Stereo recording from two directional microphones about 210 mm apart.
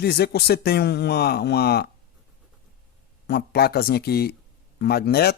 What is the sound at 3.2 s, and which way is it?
A man's voice, 50° left (ahead or behind).